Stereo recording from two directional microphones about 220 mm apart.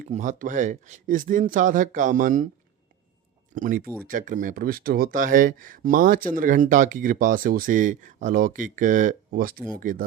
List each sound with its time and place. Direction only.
0.0 s speech: 35° right (ahead or behind)
3.5 s speech: 35° right (ahead or behind)